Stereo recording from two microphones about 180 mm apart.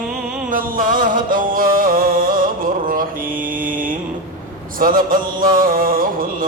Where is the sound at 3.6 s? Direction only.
50° right (ahead or behind).